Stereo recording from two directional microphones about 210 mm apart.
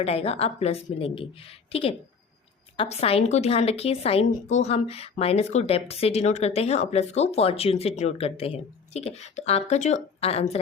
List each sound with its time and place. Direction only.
0.0 s a woman's voice: 30° left (ahead or behind)